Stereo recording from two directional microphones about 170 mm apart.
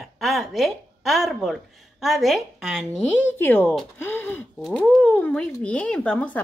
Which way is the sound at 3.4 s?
10° left (ahead or behind).